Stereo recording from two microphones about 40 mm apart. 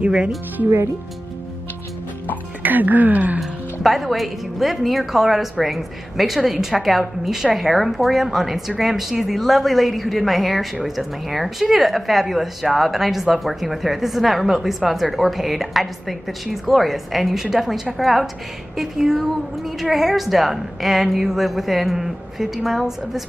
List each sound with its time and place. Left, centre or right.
2.6 s speech: right
3.8 s a woman's voice: centre